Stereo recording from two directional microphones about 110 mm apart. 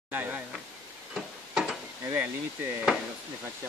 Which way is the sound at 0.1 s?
15° right (ahead or behind).